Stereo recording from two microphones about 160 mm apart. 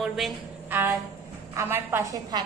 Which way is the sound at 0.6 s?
10° right (ahead or behind).